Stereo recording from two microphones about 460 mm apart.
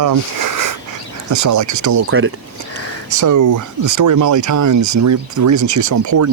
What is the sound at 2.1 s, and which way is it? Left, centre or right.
Speech, right.